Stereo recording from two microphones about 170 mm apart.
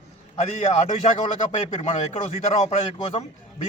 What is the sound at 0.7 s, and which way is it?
A man's voice, 40° left (ahead or behind).